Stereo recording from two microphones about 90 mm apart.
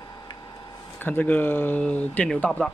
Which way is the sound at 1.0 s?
20° left (ahead or behind).